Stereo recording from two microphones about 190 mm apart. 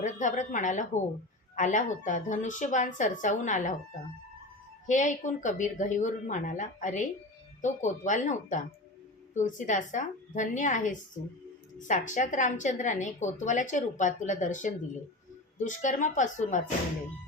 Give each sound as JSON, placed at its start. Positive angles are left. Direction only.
{"t": 0.0, "sound": "a woman's voice", "side_deg": 40}
{"t": 4.9, "sound": "a woman's voice", "side_deg": 40}